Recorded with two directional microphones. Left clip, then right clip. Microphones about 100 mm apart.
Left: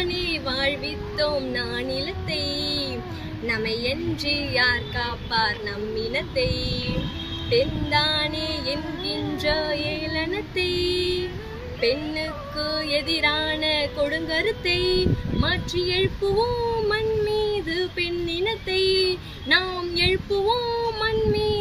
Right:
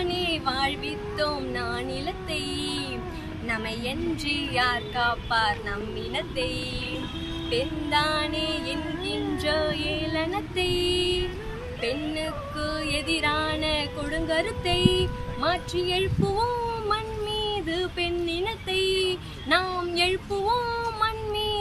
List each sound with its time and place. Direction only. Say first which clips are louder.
0.0 s music: left 1 dB; 40° right (ahead or behind)
7.4 s child singing: left 6 dB; 40° right (ahead or behind)
12.6 s music: left 4 dB; 40° right (ahead or behind)
16.9 s child singing: left 5 dB; 35° right (ahead or behind)